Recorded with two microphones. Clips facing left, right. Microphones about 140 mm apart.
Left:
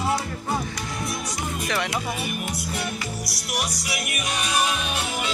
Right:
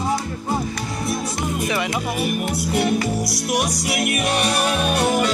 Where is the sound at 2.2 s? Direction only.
55° right (ahead or behind).